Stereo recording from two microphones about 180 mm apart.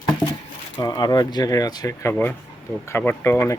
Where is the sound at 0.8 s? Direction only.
20° left (ahead or behind).